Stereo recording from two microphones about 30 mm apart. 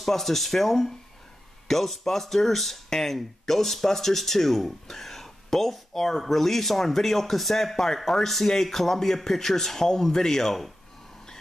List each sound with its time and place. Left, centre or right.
0.0 s speech: centre